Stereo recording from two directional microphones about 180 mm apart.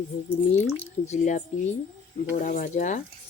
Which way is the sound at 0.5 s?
40° left (ahead or behind).